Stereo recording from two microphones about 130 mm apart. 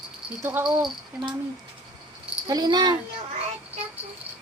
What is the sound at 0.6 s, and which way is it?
Speech, 35° right (ahead or behind).